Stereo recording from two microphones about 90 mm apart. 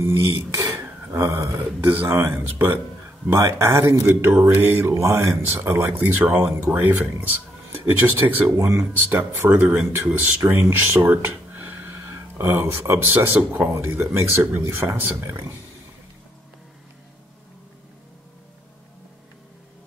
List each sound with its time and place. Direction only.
0.0 s a sound: 25° right (ahead or behind)
1.6 s speech: 20° right (ahead or behind)
8.5 s speech: 35° right (ahead or behind)
9.1 s speech: 20° right (ahead or behind)
10.4 s speech: 30° right (ahead or behind)